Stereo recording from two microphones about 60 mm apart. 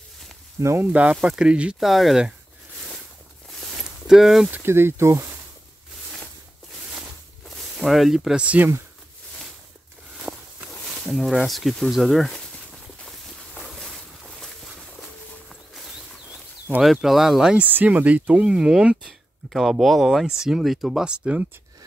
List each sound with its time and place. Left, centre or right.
0.6 s speech: right
1.2 s speech: centre
1.8 s speech: centre
3.8 s a sound: centre
4.6 s speech: right
7.4 s a sound: centre
8.4 s speech: right
10.3 s walk: centre
11.1 s speech: centre
13.6 s boat: centre
16.8 s speech: centre
17.6 s speech: right; by 19.1 s centre
19.5 s speech: centre